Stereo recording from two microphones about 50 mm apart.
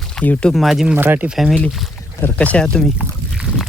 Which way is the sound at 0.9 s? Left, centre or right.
Right.